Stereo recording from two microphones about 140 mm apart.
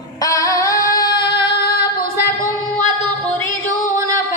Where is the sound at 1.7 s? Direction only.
90° left.